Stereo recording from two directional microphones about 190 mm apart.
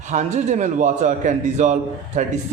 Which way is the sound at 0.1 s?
40° right (ahead or behind).